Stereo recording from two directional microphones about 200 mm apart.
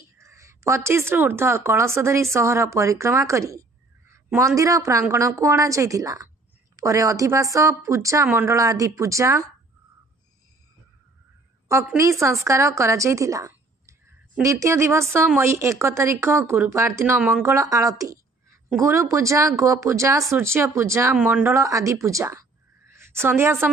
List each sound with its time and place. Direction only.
0.2 s a woman's voice: 15° right (ahead or behind)
4.1 s a sound: 15° right (ahead or behind)
4.6 s a woman's voice: 15° right (ahead or behind)
11.6 s a woman's voice: 15° right (ahead or behind)